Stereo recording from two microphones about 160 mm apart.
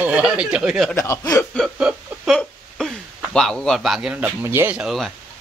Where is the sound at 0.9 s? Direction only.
20° left (ahead or behind).